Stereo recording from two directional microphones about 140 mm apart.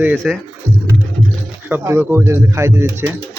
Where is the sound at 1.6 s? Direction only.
15° right (ahead or behind).